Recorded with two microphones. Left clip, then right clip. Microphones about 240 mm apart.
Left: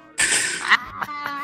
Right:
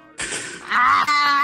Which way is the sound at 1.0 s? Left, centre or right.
Right.